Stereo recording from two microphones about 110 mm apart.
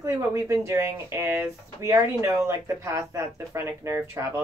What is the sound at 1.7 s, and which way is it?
Speech, 30° right (ahead or behind).